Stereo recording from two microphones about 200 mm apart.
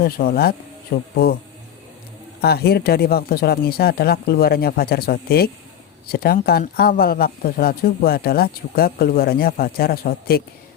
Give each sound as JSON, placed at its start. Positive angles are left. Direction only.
{"t": 0.0, "sound": "speech", "side_deg": 50}
{"t": 2.4, "sound": "speech", "side_deg": 50}